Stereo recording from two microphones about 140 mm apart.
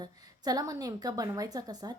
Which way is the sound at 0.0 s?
25° right (ahead or behind).